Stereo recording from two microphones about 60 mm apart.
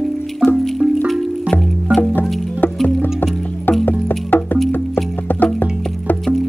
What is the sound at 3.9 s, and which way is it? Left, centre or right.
Music, left.